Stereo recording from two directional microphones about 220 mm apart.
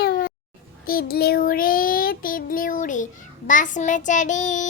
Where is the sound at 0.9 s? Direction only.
45° left (ahead or behind).